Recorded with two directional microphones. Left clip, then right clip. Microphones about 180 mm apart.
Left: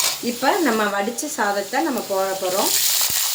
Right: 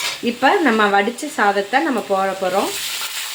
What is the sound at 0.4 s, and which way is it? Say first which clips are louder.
Speech: right 4 dB; 45° right (ahead or behind).